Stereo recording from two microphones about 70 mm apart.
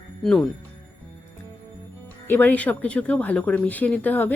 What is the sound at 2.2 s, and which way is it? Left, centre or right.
Speech, left.